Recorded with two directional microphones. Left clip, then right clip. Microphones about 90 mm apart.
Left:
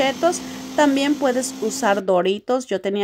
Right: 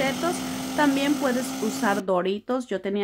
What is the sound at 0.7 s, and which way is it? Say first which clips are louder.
Speech: left 5 dB; 35° left (ahead or behind).